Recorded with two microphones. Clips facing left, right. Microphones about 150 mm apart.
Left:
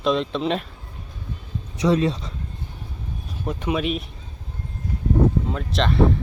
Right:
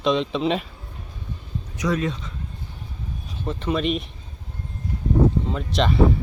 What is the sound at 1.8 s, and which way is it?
Speech, 30° left (ahead or behind).